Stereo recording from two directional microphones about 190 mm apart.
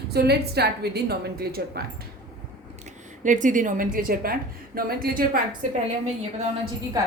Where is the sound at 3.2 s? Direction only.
40° right (ahead or behind).